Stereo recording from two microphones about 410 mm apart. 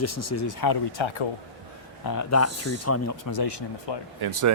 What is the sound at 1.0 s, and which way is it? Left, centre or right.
Speech, left.